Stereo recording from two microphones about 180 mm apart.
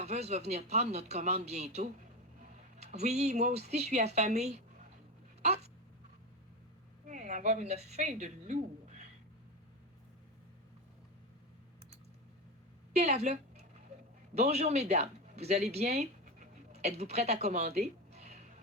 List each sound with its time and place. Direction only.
0.0 s speech: 35° right (ahead or behind)
7.1 s a woman's voice: 45° right (ahead or behind)
12.9 s a woman's voice: 35° right (ahead or behind)